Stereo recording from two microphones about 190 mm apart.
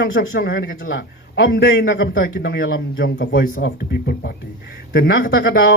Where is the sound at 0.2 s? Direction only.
55° left (ahead or behind).